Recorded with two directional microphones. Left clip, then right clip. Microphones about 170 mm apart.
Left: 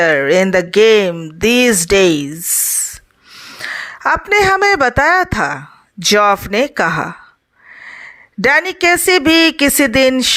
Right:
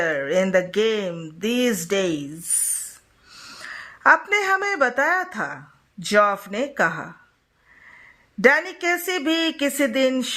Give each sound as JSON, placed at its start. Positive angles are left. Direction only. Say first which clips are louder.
{"t": 0.0, "sound": "speech", "louder": "left 10 dB", "side_deg": 35}
{"t": 3.3, "sound": "a sound", "louder": "left 8 dB", "side_deg": 25}
{"t": 3.6, "sound": "a woman's voice", "louder": "left 4 dB", "side_deg": 35}